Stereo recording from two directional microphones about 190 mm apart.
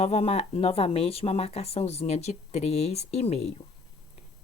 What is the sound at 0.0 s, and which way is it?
Speech, 35° left (ahead or behind).